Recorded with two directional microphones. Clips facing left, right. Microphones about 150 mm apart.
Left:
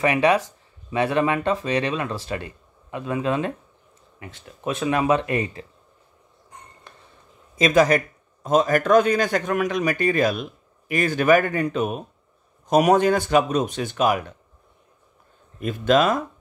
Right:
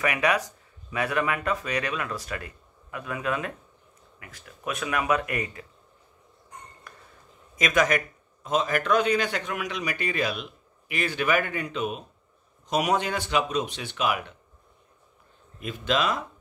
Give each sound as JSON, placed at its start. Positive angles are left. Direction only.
{"t": 0.0, "sound": "speech", "side_deg": 30}
{"t": 6.9, "sound": "a sound", "side_deg": 25}
{"t": 7.5, "sound": "a man's voice", "side_deg": 30}
{"t": 15.6, "sound": "a man's voice", "side_deg": 50}